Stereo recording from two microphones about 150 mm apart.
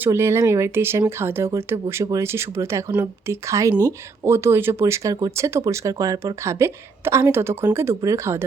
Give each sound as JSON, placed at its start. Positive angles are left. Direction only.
{"t": 0.0, "sound": "speech", "side_deg": -15}